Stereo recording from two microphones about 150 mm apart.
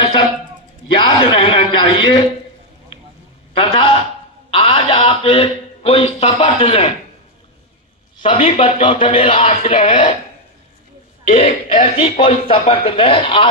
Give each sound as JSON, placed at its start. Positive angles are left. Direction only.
{"t": 0.9, "sound": "speech", "side_deg": 35}
{"t": 3.5, "sound": "a sound", "side_deg": 35}
{"t": 8.2, "sound": "speech", "side_deg": 40}
{"t": 11.3, "sound": "speech", "side_deg": 40}